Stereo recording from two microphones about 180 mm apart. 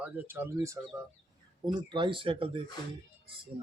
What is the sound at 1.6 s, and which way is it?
Speech, 25° right (ahead or behind).